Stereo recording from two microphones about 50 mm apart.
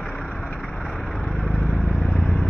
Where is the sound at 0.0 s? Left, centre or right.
Centre.